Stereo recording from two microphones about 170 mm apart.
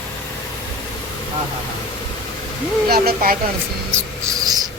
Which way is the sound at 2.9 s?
65° right (ahead or behind).